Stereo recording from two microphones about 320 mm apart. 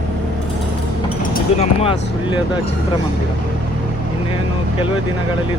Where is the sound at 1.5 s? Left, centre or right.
Centre.